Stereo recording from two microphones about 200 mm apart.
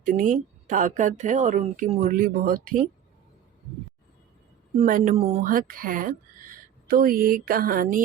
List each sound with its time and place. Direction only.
0.0 s a woman's voice: 40° right (ahead or behind)
4.8 s a woman's voice: 40° right (ahead or behind)
5.4 s a woman's voice: 45° right (ahead or behind)
7.4 s mantra: 45° right (ahead or behind)